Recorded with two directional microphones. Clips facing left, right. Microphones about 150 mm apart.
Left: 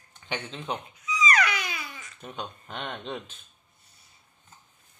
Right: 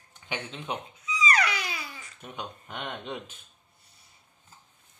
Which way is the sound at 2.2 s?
10° right (ahead or behind).